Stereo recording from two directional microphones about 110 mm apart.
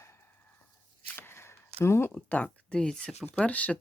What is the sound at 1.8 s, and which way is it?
Speech, 25° left (ahead or behind).